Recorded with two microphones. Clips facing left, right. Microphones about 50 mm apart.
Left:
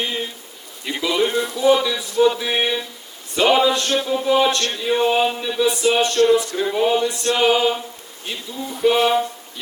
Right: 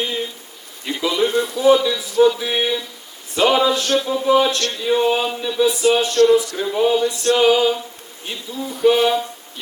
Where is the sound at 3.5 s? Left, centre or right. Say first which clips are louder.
Left 2 dB; centre.